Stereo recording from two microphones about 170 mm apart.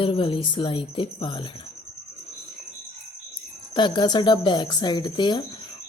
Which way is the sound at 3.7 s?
25° left (ahead or behind).